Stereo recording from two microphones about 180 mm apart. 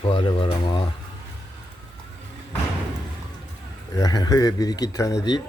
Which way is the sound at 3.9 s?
20° left (ahead or behind).